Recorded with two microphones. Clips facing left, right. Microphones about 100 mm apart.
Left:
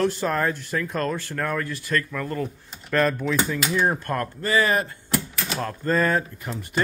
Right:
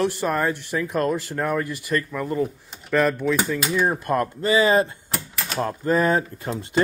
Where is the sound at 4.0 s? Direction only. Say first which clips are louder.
Right 4 dB; 20° right (ahead or behind).